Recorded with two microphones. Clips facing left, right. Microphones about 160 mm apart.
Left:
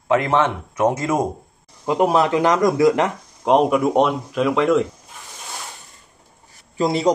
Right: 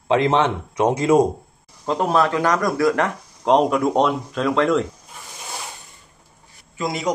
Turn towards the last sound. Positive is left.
turn(degrees=30)  # may be behind; listen again after turning